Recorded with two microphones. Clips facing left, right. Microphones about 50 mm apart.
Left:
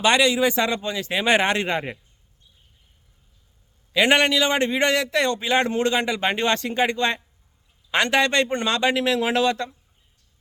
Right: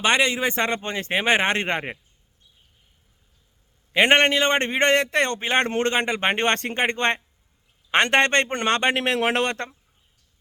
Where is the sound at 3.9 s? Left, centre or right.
Right.